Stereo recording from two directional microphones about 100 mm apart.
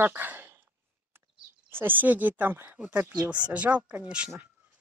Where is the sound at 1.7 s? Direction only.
20° right (ahead or behind).